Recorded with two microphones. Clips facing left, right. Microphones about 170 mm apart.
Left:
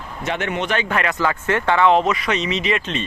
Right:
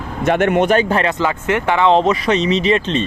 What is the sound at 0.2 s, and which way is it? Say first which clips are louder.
Speech: right 10 dB; 50° right (ahead or behind).